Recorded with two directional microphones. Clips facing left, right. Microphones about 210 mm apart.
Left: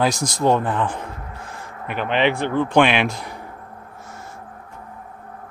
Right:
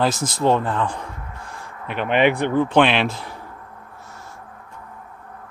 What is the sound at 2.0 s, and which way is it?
Speech, 50° right (ahead or behind).